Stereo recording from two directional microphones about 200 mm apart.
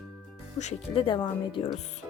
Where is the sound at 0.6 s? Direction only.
30° left (ahead or behind).